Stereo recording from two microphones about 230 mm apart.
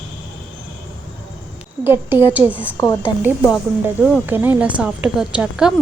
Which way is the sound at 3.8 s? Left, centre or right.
Centre.